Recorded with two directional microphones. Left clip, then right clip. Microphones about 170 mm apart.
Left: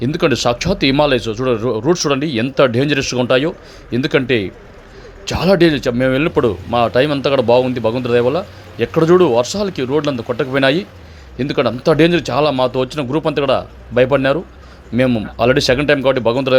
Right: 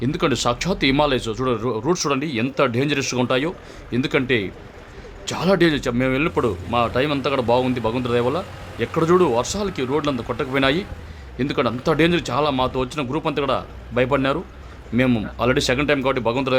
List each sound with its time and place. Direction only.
0.0 s speech: 15° left (ahead or behind)